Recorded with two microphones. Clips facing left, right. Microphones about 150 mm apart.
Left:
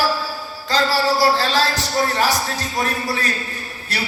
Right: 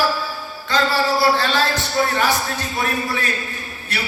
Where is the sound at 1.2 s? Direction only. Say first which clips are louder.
Left 1 dB; 35° left (ahead or behind).